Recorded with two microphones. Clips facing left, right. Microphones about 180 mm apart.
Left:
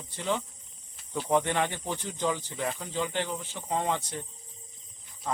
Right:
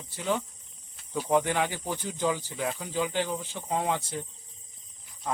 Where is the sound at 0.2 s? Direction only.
5° right (ahead or behind).